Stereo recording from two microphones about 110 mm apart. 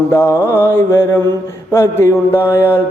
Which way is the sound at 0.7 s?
20° left (ahead or behind).